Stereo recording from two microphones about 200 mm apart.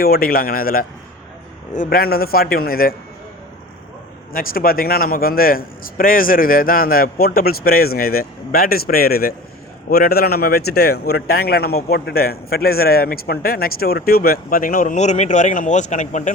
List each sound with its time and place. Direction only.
0.0 s a man's voice: 50° left (ahead or behind)
4.3 s a man's voice: 45° left (ahead or behind)